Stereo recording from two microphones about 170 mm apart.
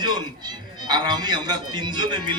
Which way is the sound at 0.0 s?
25° right (ahead or behind).